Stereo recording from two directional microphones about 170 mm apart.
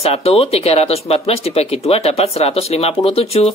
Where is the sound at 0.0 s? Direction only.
35° left (ahead or behind).